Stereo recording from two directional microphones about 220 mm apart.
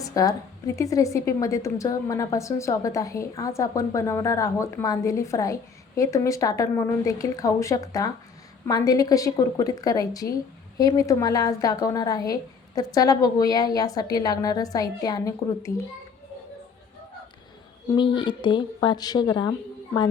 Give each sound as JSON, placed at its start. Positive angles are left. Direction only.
{"t": 0.0, "sound": "a sound", "side_deg": 15}
{"t": 0.8, "sound": "a woman's voice", "side_deg": 15}
{"t": 17.9, "sound": "speech", "side_deg": 20}